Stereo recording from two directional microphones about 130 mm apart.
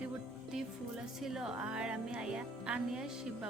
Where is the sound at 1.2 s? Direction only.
5° right (ahead or behind).